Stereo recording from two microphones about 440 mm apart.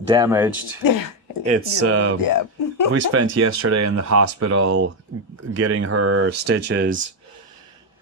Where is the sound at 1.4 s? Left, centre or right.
Centre.